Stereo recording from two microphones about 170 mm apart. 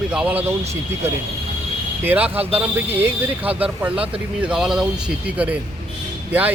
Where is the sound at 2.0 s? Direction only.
10° right (ahead or behind).